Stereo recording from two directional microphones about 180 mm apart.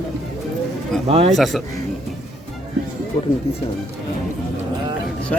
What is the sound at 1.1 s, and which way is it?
Speech, 35° right (ahead or behind).